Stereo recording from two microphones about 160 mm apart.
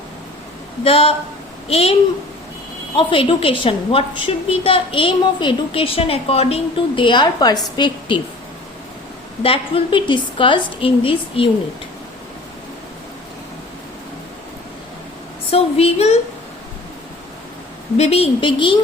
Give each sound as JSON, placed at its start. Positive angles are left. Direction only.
{"t": 0.9, "sound": "a woman's voice", "side_deg": 35}
{"t": 9.4, "sound": "a woman's voice", "side_deg": 35}
{"t": 15.4, "sound": "a woman's voice", "side_deg": 40}
{"t": 17.9, "sound": "a woman's voice", "side_deg": 40}